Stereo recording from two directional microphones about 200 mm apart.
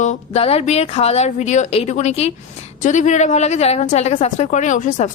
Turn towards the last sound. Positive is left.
turn(degrees=40)  # may be behind; listen again after turning